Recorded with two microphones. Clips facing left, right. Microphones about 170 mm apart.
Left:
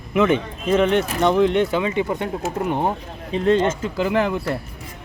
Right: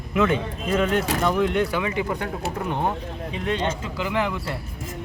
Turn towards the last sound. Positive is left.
turn(degrees=40)  # may be behind; listen again after turning